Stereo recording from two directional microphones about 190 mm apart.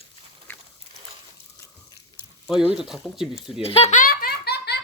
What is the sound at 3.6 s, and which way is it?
Belly laugh, 30° left (ahead or behind).